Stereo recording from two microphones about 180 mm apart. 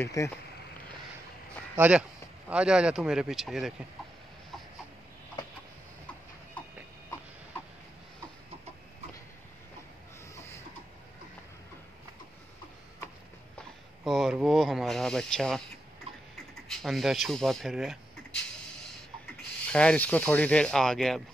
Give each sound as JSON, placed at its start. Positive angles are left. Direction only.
{"t": 0.0, "sound": "speech", "side_deg": 15}
{"t": 1.8, "sound": "speech", "side_deg": -5}
{"t": 10.3, "sound": "a sound", "side_deg": 15}
{"t": 14.0, "sound": "speech", "side_deg": 0}
{"t": 16.6, "sound": "speech", "side_deg": 0}
{"t": 19.7, "sound": "speech", "side_deg": 5}